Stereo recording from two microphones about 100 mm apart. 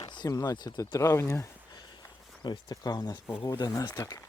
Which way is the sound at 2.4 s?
45° left (ahead or behind).